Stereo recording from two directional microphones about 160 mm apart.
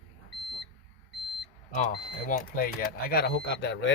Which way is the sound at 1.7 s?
50° left (ahead or behind).